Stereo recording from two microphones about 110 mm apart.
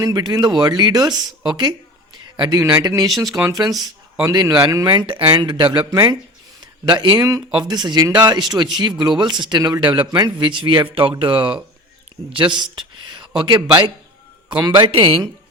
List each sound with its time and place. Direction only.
0.0 s speech: 35° right (ahead or behind)
2.1 s a sound: 40° right (ahead or behind)
2.7 s speech: 35° right (ahead or behind)
5.8 s speech: 30° right (ahead or behind)
6.8 s speech: 45° right (ahead or behind)
7.2 s speech: 30° right (ahead or behind)
14.8 s speech: 55° right (ahead or behind)